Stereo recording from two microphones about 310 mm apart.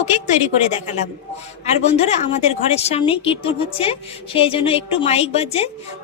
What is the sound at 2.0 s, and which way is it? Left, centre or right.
A woman's voice, left.